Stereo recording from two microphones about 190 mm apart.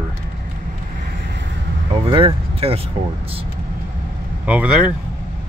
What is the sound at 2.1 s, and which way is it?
Speech, 30° right (ahead or behind).